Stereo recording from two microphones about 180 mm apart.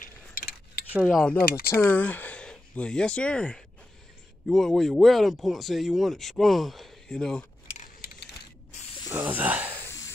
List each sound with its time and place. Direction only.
0.0 s cutlery: 55° left (ahead or behind)
1.0 s speech: 5° left (ahead or behind)
7.7 s keys jangling: 50° left (ahead or behind)
8.7 s spray: 35° left (ahead or behind)
9.1 s speech: 10° right (ahead or behind)
9.8 s cough: 15° left (ahead or behind)